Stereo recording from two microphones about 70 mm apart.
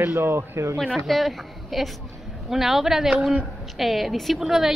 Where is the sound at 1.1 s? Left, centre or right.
Centre.